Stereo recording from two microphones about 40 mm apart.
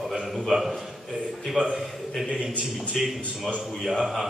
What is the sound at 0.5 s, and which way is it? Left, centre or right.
A man's voice, centre.